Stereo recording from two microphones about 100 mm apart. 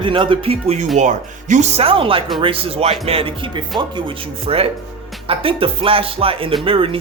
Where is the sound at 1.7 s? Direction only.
80° right.